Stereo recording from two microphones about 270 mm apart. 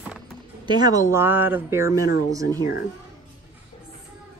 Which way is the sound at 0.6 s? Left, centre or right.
Centre.